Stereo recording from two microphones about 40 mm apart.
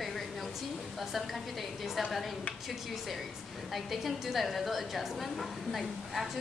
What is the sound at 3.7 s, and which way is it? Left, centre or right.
A woman's voice, centre.